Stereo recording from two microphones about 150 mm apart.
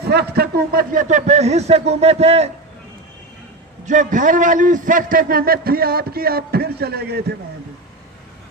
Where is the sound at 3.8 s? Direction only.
55° right (ahead or behind); by 7.3 s 90° right.